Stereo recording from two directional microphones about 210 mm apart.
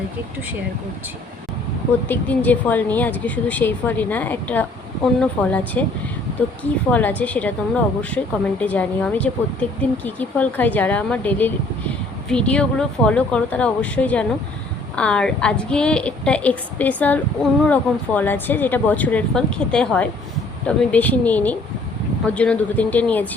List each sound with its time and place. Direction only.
2.0 s a woman's voice: 10° left (ahead or behind)